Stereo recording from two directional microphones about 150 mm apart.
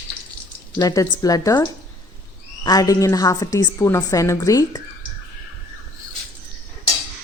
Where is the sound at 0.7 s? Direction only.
20° left (ahead or behind).